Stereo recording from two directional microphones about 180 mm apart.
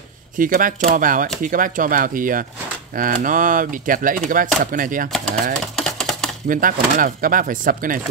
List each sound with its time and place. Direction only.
0.4 s speech: 50° right (ahead or behind)
5.8 s typewriter: centre (ahead or behind)
6.5 s speech: 50° right (ahead or behind)